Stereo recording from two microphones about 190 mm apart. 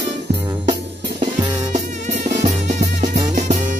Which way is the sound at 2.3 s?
40° right (ahead or behind).